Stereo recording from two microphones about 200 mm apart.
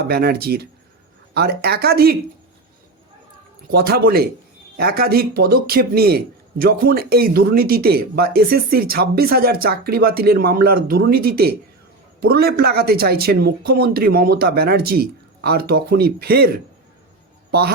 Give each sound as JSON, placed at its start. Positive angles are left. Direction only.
{"t": 0.1, "sound": "a man's voice", "side_deg": -50}
{"t": 3.7, "sound": "a man's voice", "side_deg": -50}